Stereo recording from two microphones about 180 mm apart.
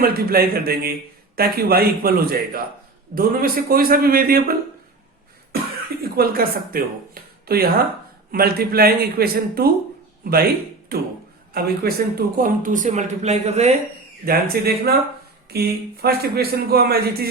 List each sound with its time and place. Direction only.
0.0 s a man's voice: 55° right (ahead or behind)
6.1 s a man's voice: 55° right (ahead or behind); by 13.7 s 35° right (ahead or behind)
14.3 s a man's voice: 60° right (ahead or behind)